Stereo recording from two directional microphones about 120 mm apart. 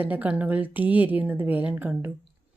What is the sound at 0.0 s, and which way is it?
A woman's voice, 15° right (ahead or behind).